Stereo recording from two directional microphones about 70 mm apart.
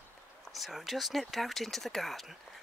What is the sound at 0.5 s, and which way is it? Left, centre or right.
Speech, centre.